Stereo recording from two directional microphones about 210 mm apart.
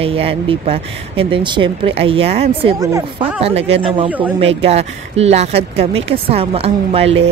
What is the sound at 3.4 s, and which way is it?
Speech, 30° right (ahead or behind).